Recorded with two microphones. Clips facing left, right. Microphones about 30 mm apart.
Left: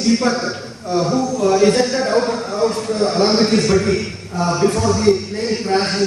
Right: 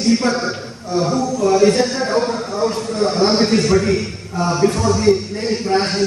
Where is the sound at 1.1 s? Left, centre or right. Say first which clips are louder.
Right 1 dB; centre.